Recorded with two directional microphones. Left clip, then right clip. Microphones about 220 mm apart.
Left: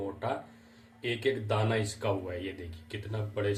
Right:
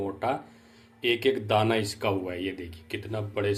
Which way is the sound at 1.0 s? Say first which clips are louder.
Right 6 dB; 35° right (ahead or behind).